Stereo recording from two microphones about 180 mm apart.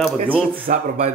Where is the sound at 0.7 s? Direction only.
45° right (ahead or behind).